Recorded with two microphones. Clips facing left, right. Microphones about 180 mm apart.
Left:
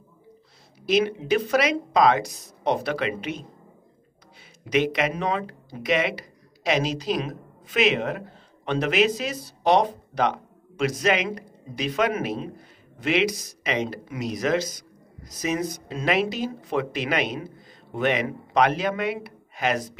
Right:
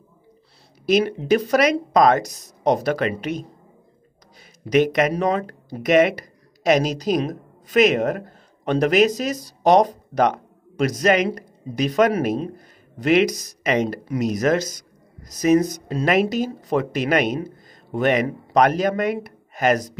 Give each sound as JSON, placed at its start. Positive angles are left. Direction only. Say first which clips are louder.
{"t": 0.8, "sound": "speech", "louder": "right 4 dB", "side_deg": -40}
{"t": 4.6, "sound": "speech", "louder": "right 5 dB", "side_deg": -45}